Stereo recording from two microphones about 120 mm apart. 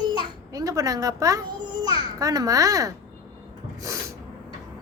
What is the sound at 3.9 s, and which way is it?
Snort, 25° right (ahead or behind).